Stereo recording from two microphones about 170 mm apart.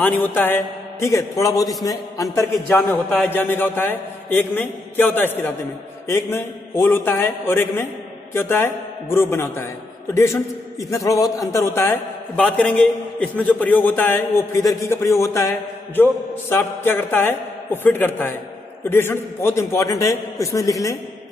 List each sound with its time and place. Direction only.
0.0 s a man's voice: 10° left (ahead or behind)